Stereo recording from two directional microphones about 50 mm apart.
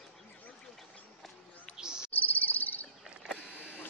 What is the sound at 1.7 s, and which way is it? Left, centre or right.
Insect, centre.